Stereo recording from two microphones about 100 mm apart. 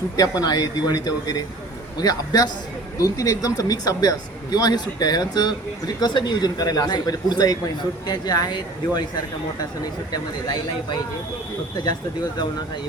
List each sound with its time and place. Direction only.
0.2 s speech: 40° left (ahead or behind)
10.1 s speech: 40° left (ahead or behind)